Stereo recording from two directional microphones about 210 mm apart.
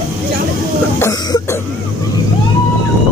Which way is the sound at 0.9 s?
10° left (ahead or behind).